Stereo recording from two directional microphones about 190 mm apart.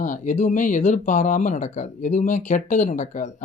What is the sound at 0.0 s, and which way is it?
Speech, 40° left (ahead or behind).